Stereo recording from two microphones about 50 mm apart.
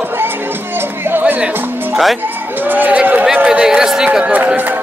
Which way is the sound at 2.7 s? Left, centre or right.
Right.